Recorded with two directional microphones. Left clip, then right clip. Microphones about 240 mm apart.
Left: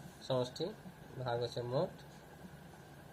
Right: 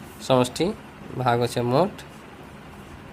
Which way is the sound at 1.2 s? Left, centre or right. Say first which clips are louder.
Right 16 dB; right.